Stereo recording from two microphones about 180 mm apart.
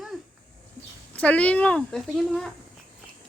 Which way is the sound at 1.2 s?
10° left (ahead or behind).